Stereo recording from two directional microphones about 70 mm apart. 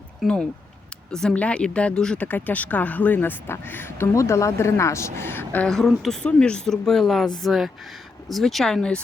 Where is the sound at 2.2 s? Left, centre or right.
Left.